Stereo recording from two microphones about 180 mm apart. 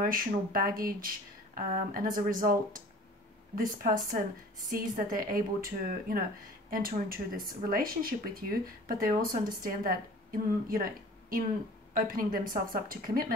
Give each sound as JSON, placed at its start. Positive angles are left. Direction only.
{"t": 0.0, "sound": "speech", "side_deg": -50}